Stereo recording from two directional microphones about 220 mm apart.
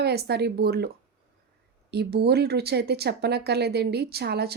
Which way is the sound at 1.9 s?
45° right (ahead or behind).